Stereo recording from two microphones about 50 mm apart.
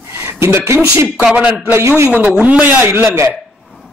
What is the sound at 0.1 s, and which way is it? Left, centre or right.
A man's voice, right.